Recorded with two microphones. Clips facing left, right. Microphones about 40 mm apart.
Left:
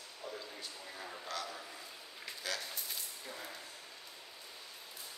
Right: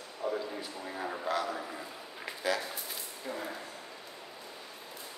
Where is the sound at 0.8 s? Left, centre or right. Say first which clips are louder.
Right 12 dB; right.